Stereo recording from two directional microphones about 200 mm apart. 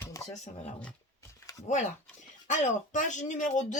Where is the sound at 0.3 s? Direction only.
35° left (ahead or behind).